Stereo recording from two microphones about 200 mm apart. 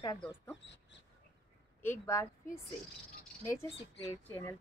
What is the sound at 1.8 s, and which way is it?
Speech, 15° left (ahead or behind).